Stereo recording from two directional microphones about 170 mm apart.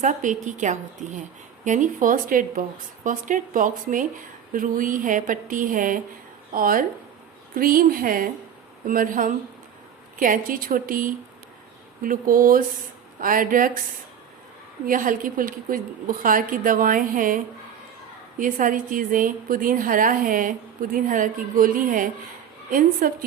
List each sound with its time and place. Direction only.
0.0 s speech: 50° right (ahead or behind)
14.8 s speech: 55° right (ahead or behind)